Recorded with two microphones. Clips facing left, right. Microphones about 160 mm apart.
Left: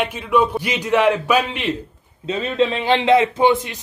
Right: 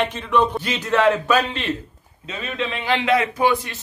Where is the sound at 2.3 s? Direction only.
30° left (ahead or behind).